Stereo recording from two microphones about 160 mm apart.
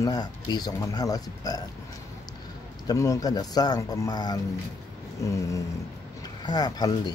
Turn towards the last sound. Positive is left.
turn(degrees=25)  # may be behind; listen again after turning